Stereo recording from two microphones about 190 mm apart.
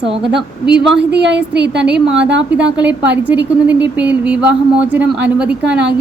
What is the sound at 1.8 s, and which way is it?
A woman's voice, 5° right (ahead or behind).